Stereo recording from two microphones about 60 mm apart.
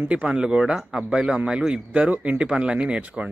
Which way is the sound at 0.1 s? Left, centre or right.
Centre.